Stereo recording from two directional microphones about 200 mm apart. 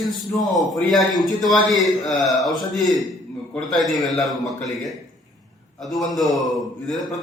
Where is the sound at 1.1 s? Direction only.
20° left (ahead or behind).